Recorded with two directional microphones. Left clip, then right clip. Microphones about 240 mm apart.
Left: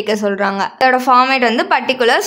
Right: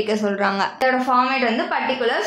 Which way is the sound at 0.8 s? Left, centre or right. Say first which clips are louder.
Left 9 dB; left.